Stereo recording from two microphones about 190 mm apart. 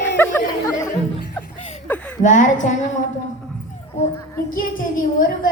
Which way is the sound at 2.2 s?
40° left (ahead or behind).